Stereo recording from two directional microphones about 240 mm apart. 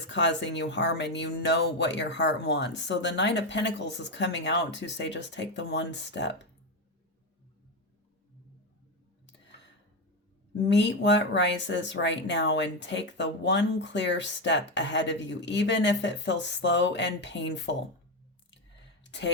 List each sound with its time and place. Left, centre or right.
0.1 s speech: left
10.5 s speech: left
19.0 s a sound: left